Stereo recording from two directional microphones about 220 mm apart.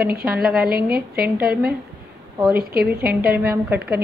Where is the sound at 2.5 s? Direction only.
45° right (ahead or behind).